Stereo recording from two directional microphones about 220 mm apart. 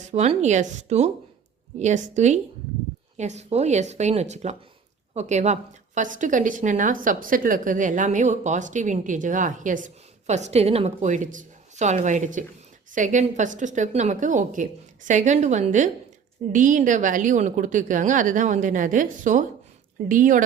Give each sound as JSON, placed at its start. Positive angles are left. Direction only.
{"t": 0.0, "sound": "a woman's voice", "side_deg": -30}